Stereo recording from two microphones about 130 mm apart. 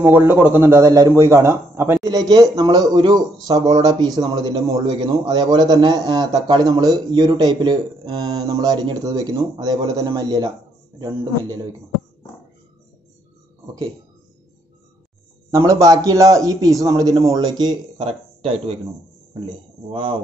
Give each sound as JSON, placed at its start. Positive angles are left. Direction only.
{"t": 0.0, "sound": "a man's voice", "side_deg": -15}
{"t": 15.5, "sound": "speech", "side_deg": -25}